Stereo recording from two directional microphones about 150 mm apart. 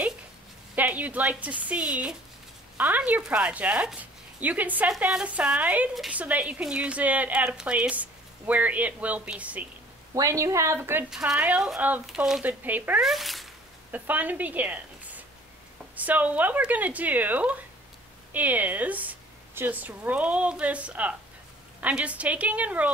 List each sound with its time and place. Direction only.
0.7 s speech: 10° right (ahead or behind)
10.1 s a woman's voice: 20° right (ahead or behind)
11.1 s speech: 5° right (ahead or behind)
13.1 s speech: centre (ahead or behind)
13.9 s a woman's voice: 10° right (ahead or behind)